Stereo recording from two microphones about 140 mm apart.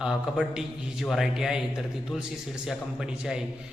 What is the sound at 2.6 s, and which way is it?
Speech, 5° right (ahead or behind).